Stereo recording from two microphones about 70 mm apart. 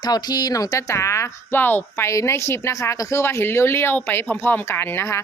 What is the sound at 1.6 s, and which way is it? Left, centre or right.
Speech, left.